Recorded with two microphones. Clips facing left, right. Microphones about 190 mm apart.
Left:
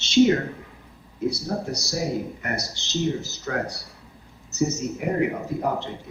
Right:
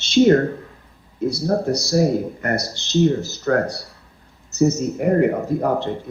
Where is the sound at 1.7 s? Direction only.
55° right (ahead or behind).